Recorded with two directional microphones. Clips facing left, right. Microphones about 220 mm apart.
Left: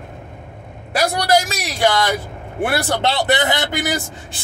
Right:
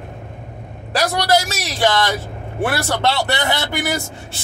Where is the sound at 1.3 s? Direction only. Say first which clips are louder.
Left 1 dB; 15° left (ahead or behind).